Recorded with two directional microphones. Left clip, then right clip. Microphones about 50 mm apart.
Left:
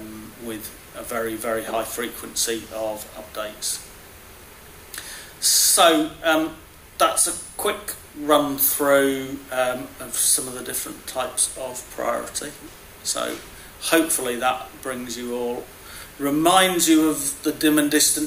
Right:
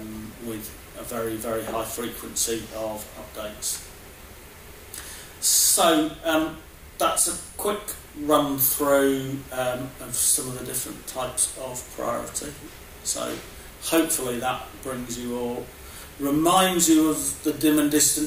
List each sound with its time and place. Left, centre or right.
0.6 s speech: left
5.4 s speech: left